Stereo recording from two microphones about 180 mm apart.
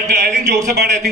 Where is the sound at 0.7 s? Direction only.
65° right (ahead or behind).